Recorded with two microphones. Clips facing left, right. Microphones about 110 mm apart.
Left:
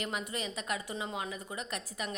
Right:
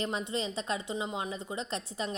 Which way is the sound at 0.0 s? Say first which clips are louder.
Right 4 dB; 30° right (ahead or behind).